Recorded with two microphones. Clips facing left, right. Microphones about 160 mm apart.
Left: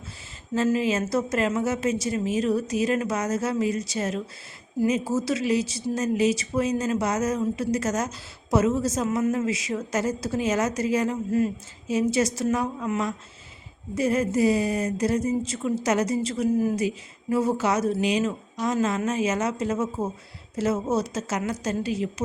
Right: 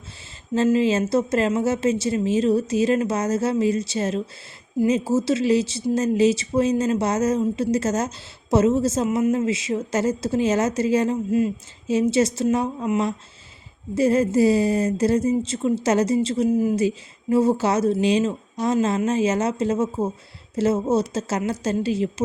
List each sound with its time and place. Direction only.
0.5 s speech: 25° right (ahead or behind)